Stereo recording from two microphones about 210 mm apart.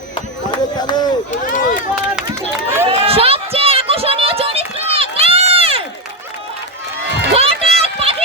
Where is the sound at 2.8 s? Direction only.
25° right (ahead or behind).